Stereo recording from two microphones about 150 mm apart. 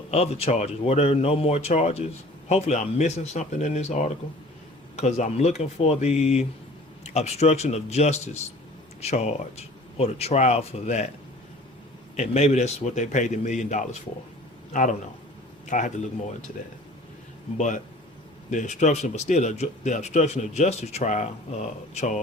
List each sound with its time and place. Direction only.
0.1 s speech: 45° left (ahead or behind)
12.1 s speech: 45° left (ahead or behind)
18.5 s speech: 55° left (ahead or behind)